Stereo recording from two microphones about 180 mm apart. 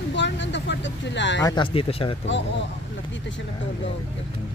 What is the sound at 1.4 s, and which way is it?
Speech, 25° left (ahead or behind).